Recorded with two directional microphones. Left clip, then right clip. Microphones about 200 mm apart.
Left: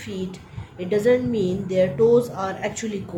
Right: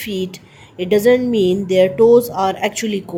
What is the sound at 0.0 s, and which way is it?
Speech, 35° right (ahead or behind).